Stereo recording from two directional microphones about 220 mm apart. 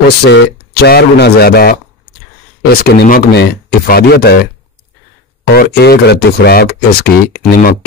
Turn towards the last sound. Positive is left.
turn(degrees=40)  # may be behind; listen again after turning